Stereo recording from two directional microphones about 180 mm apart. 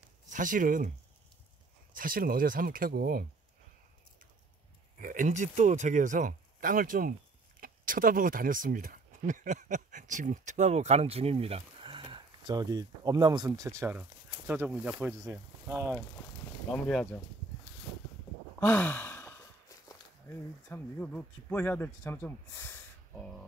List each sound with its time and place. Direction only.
0.3 s speech: 45° right (ahead or behind)
2.0 s speech: 50° right (ahead or behind)
4.9 s speech: 50° right (ahead or behind); by 16.0 s 15° right (ahead or behind)
16.7 s speech: 5° left (ahead or behind)
18.6 s sigh: 10° left (ahead or behind)
20.6 s speech: 10° left (ahead or behind)